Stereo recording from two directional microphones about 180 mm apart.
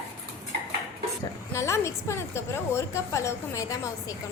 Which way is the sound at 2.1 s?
15° left (ahead or behind).